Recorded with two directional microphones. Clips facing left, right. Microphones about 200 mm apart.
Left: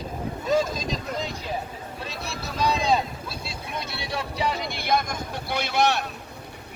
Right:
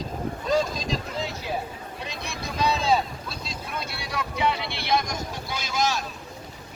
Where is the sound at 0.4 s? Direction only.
5° left (ahead or behind).